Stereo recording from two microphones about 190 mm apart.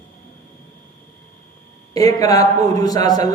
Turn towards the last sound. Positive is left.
turn(degrees=20)  # may be behind; listen again after turning